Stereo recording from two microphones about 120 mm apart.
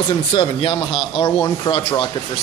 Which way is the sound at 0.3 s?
45° left (ahead or behind).